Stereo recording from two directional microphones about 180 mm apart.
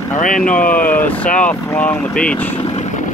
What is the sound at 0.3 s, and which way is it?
Speech, 5° left (ahead or behind).